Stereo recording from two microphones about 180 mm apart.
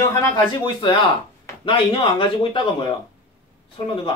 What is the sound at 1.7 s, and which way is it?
Speech, 30° left (ahead or behind).